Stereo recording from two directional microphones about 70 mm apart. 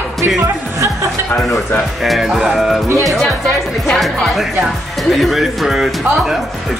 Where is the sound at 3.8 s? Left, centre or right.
Centre.